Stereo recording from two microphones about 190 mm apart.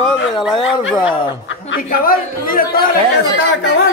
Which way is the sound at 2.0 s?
50° left (ahead or behind).